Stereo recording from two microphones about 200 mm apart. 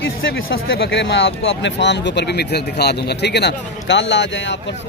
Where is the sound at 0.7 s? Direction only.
55° left (ahead or behind).